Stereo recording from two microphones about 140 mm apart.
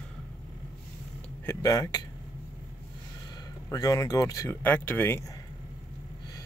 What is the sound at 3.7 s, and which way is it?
Speech, 25° left (ahead or behind).